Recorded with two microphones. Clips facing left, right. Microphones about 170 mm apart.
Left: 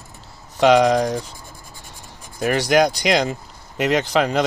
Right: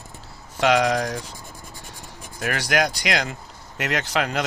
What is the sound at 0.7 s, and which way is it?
Speech, 25° left (ahead or behind).